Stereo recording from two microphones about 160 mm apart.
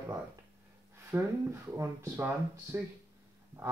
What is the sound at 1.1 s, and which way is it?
Speech, 20° right (ahead or behind).